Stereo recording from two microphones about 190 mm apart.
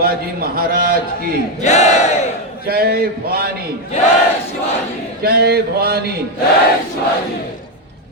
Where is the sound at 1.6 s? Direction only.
35° left (ahead or behind).